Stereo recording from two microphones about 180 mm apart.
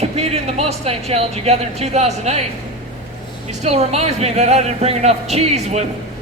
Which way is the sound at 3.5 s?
40° right (ahead or behind).